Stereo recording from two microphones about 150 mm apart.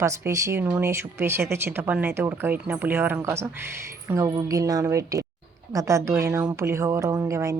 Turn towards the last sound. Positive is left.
turn(degrees=-20)  # may be behind; listen again after turning